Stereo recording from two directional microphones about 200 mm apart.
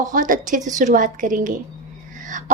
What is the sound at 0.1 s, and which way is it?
A woman's voice, 40° right (ahead or behind).